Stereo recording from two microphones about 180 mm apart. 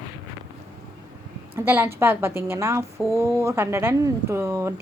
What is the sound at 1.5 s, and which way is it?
Speech, 10° right (ahead or behind).